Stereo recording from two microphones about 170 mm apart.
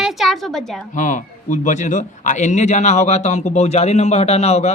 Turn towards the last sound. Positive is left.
turn(degrees=40)  # may be behind; listen again after turning